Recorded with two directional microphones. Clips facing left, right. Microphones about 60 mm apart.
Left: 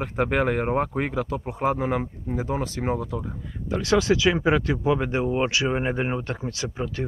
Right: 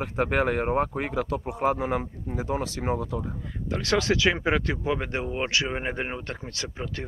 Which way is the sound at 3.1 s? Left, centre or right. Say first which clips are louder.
Even; right.